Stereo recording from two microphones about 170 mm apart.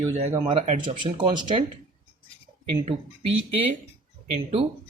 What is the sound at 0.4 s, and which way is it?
Speech, 35° right (ahead or behind).